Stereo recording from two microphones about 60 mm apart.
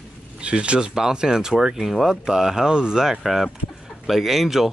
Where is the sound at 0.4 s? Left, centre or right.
Centre.